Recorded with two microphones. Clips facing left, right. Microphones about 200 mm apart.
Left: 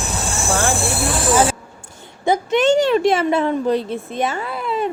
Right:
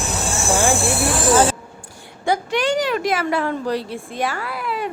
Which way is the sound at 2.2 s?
20° left (ahead or behind).